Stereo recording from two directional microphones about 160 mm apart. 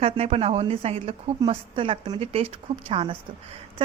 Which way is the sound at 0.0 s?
40° right (ahead or behind).